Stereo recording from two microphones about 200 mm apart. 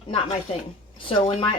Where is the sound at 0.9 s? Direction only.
30° left (ahead or behind).